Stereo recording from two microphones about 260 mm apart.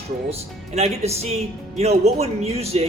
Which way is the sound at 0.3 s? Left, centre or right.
Right.